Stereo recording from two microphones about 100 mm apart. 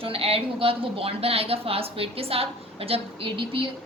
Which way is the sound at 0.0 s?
70° right (ahead or behind).